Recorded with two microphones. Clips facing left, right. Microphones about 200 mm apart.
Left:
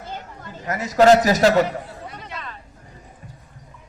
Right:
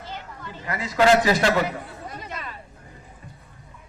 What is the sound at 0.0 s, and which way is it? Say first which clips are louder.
A woman's voice: left 2 dB; 45° left (ahead or behind).